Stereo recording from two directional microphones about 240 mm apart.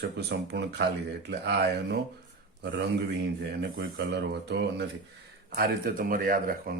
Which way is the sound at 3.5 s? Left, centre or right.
Right.